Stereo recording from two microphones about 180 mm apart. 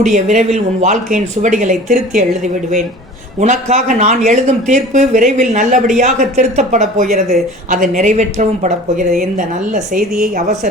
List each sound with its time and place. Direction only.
0.0 s speech: 45° right (ahead or behind)
3.4 s speech: 40° right (ahead or behind)